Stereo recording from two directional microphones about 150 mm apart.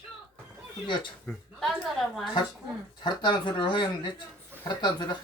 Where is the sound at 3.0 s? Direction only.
30° left (ahead or behind).